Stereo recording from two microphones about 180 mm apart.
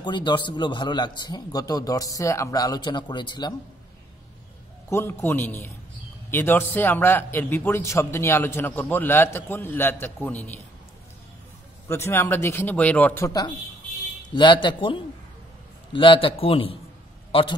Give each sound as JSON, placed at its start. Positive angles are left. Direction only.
{"t": 0.0, "sound": "a man's voice", "side_deg": 25}
{"t": 4.8, "sound": "a man's voice", "side_deg": 15}
{"t": 11.9, "sound": "a man's voice", "side_deg": 15}